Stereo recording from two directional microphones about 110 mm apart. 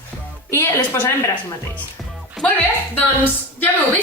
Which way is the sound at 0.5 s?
20° left (ahead or behind).